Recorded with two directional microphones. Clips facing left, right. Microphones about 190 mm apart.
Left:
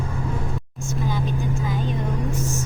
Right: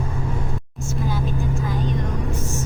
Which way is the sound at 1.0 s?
Centre (ahead or behind).